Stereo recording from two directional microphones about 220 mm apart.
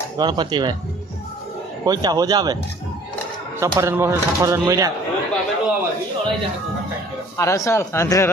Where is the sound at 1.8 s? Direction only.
20° right (ahead or behind).